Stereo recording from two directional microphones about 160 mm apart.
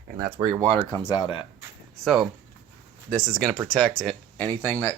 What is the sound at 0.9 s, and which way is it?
Speech, 20° left (ahead or behind).